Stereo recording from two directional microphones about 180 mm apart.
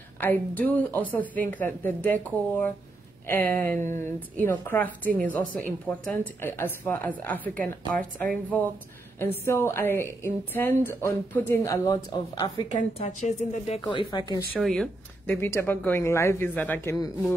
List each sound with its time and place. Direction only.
0.2 s a woman's voice: 10° left (ahead or behind)
3.3 s a woman's voice: 10° left (ahead or behind)
12.9 s speech: 35° left (ahead or behind)
13.8 s speech: 25° left (ahead or behind)
14.5 s a woman's voice: 5° left (ahead or behind)